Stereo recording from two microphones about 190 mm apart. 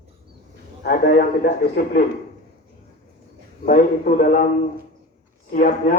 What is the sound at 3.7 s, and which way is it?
Speech, 50° left (ahead or behind).